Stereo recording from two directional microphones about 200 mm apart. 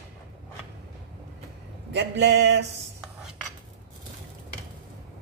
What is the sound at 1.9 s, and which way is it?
Speech, 60° right (ahead or behind).